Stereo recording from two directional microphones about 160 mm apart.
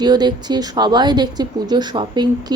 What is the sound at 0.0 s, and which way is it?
A woman's voice, 25° right (ahead or behind).